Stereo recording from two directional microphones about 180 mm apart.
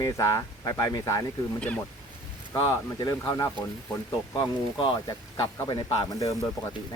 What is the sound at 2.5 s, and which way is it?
Speech, 20° left (ahead or behind).